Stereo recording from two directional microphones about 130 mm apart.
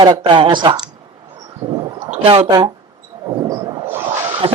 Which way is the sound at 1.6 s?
45° right (ahead or behind).